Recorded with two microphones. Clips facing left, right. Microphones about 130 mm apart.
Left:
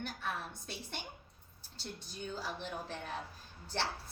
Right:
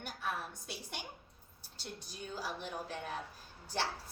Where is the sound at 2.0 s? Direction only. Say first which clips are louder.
Left 1 dB; 10° right (ahead or behind).